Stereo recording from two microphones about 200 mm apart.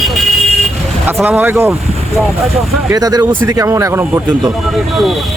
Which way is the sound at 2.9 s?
20° right (ahead or behind).